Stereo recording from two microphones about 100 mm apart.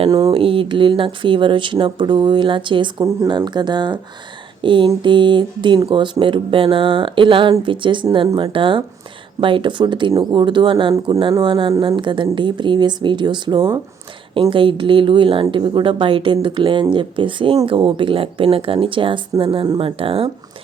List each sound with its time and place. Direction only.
0.1 s speech: 40° right (ahead or behind)
0.3 s speech: 60° right (ahead or behind)